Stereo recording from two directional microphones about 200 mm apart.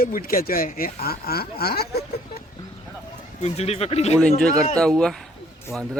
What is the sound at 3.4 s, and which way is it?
Speech, 30° left (ahead or behind).